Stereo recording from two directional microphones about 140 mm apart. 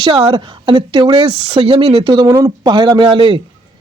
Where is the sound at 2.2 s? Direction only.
25° right (ahead or behind).